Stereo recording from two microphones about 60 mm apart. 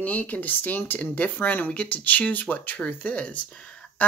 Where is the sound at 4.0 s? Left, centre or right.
Left.